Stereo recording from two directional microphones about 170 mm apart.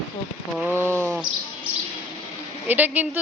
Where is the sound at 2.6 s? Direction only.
10° right (ahead or behind).